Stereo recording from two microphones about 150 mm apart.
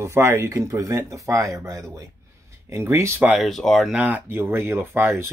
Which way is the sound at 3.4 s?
Centre (ahead or behind).